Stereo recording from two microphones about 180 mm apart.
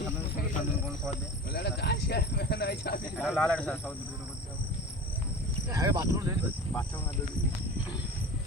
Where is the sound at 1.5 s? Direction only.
65° left (ahead or behind).